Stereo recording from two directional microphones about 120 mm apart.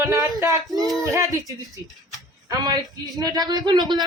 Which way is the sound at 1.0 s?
30° right (ahead or behind).